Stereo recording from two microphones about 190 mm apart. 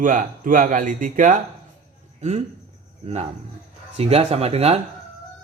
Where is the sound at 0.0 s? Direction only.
45° right (ahead or behind).